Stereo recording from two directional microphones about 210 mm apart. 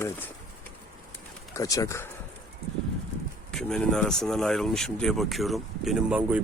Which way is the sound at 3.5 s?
5° left (ahead or behind).